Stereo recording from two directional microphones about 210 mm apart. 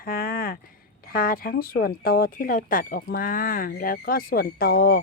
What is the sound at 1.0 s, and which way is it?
Speech, 45° left (ahead or behind).